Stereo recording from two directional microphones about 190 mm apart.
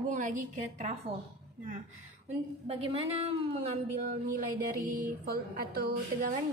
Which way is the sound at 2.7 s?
30° right (ahead or behind).